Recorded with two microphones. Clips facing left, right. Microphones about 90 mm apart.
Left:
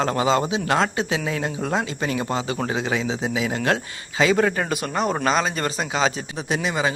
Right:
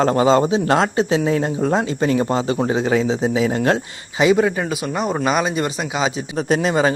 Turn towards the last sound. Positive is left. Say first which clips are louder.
# right 6 dB
turn(degrees=-40)  # may be behind; listen again after turning